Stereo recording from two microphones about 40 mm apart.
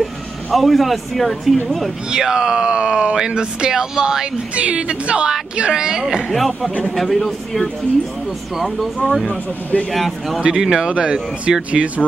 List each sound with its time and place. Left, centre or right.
0.5 s speech: centre
2.0 s speech: centre
4.6 s speech: right
6.3 s a man's voice: centre
9.3 s speech: left
9.9 s speech: centre
10.6 s speech: centre
10.9 s speech: right
11.8 s speech: centre